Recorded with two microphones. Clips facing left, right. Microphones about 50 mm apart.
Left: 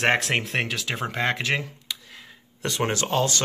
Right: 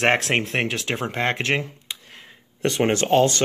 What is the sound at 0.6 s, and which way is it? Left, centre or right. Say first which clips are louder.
Speech: right 2 dB; right.